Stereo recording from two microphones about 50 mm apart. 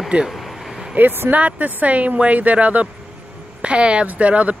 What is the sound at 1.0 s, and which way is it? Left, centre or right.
Speech, right.